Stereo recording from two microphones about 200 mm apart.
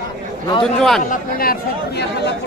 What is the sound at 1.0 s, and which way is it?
Speech, 45° left (ahead or behind).